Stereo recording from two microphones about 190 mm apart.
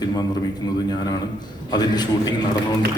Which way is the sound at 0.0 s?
20° left (ahead or behind).